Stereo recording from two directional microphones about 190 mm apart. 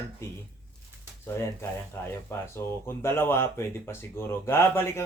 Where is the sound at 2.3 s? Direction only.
10° left (ahead or behind).